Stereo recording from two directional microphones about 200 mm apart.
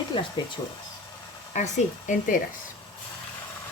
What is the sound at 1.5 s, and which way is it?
Speech, 35° left (ahead or behind).